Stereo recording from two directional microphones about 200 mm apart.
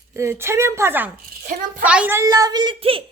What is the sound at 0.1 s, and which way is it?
A child's voice, 15° right (ahead or behind).